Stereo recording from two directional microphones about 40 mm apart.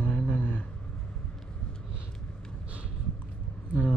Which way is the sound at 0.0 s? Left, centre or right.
Left.